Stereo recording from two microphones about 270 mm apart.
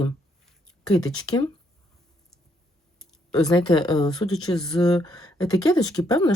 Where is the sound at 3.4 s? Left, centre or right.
Centre.